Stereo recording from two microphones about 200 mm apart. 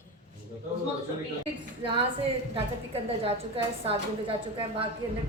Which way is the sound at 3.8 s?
30° right (ahead or behind).